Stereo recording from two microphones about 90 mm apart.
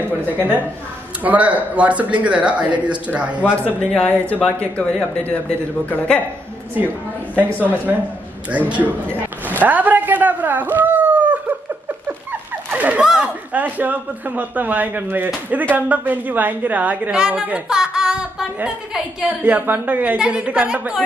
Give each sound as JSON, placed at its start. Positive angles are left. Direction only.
{"t": 1.2, "sound": "a woman's voice", "side_deg": -15}
{"t": 3.5, "sound": "speech", "side_deg": 15}
{"t": 8.5, "sound": "a woman's voice", "side_deg": -15}
{"t": 9.5, "sound": "dog", "side_deg": -20}
{"t": 12.1, "sound": "a woman's voice", "side_deg": -20}
{"t": 19.2, "sound": "a woman's voice", "side_deg": -20}